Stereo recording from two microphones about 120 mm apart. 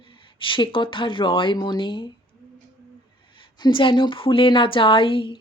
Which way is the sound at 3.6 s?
45° left (ahead or behind).